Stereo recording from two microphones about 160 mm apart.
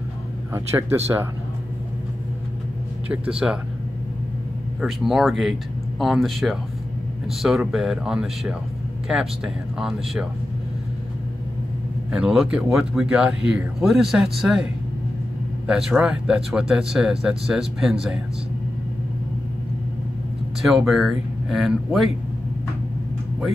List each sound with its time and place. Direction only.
0.5 s speech: 15° right (ahead or behind)
3.1 s speech: 5° right (ahead or behind)
4.8 s speech: centre (ahead or behind)
12.1 s speech: 5° right (ahead or behind)
20.6 s speech: centre (ahead or behind)